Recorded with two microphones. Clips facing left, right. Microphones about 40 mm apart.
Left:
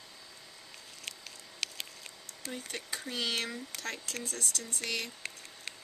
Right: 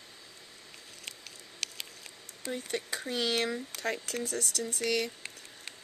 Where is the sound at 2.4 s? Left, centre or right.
Right.